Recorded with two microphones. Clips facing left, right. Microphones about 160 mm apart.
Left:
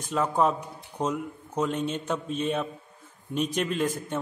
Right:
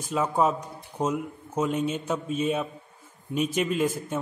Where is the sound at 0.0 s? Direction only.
5° right (ahead or behind).